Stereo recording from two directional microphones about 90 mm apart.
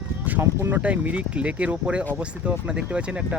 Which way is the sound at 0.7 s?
15° right (ahead or behind).